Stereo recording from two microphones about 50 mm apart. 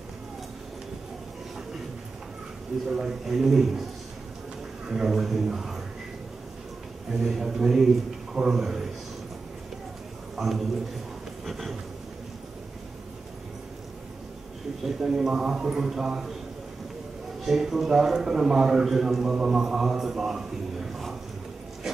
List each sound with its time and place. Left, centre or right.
2.9 s a man's voice: centre
4.8 s a man's voice: centre
7.4 s a man's voice: centre
10.3 s a man's voice: centre
11.4 s a sound: centre
15.0 s a man's voice: centre
17.5 s a man's voice: centre
21.8 s a sound: centre